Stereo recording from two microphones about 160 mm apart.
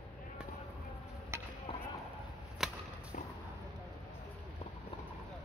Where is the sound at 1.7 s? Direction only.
40° left (ahead or behind).